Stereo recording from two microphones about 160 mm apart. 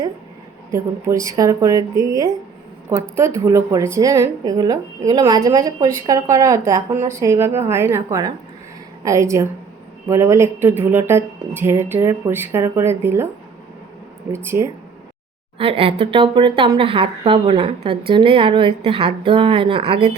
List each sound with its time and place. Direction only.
0.7 s a woman's voice: 20° right (ahead or behind)
14.3 s speech: 15° right (ahead or behind)
15.5 s a woman's voice: 35° right (ahead or behind)